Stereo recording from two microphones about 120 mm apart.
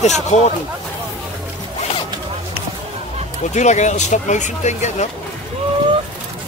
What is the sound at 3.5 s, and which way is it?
Speech, 75° left (ahead or behind).